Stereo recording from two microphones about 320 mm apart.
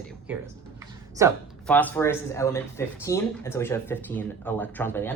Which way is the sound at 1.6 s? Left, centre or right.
Centre.